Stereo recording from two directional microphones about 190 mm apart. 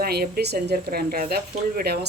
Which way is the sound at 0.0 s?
55° right (ahead or behind).